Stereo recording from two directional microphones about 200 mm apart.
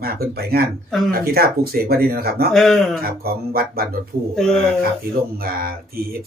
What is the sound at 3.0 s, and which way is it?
Speech, 50° right (ahead or behind).